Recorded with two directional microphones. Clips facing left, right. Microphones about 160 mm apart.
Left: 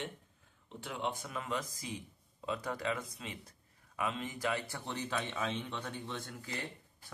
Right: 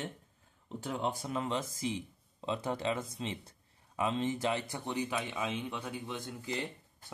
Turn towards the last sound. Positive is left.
turn(degrees=-20)  # may be behind; listen again after turning